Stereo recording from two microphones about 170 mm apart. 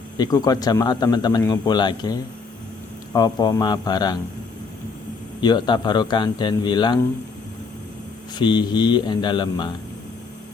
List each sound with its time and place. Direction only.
0.2 s a man's voice: 20° left (ahead or behind)
5.4 s a man's voice: 25° left (ahead or behind)
8.4 s a man's voice: 25° left (ahead or behind)